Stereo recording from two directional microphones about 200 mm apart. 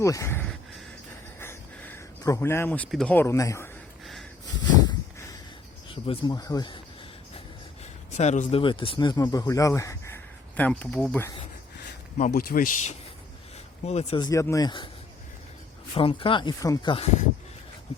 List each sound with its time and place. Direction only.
0.0 s a sound: 15° left (ahead or behind)
1.4 s speech: 10° left (ahead or behind)
4.0 s snort: centre (ahead or behind)
5.9 s speech: 25° left (ahead or behind)
8.1 s speech: 35° left (ahead or behind); by 11.3 s 10° left (ahead or behind)
12.1 s speech: 45° left (ahead or behind)
14.3 s speech: 15° left (ahead or behind)
16.0 s speech: 25° left (ahead or behind)